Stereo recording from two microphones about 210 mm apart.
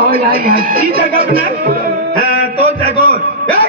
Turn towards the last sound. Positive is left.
turn(degrees=-45)  # may be behind; listen again after turning